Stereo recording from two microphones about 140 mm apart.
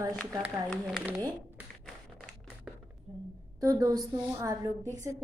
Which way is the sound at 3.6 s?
25° right (ahead or behind).